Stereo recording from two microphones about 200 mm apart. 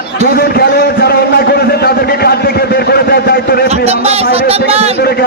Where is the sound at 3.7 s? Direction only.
30° right (ahead or behind).